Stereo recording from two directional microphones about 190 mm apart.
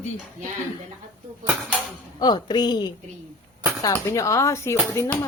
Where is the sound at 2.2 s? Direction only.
20° left (ahead or behind).